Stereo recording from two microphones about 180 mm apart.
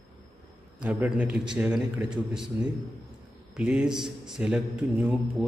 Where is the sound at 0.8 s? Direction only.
10° right (ahead or behind).